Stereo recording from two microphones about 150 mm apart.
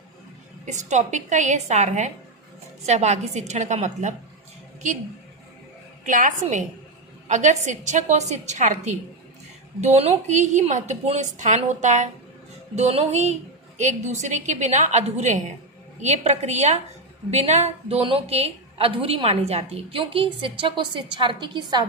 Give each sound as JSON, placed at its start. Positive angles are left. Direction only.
{"t": 0.6, "sound": "a woman's voice", "side_deg": -55}
{"t": 6.1, "sound": "a woman's voice", "side_deg": -60}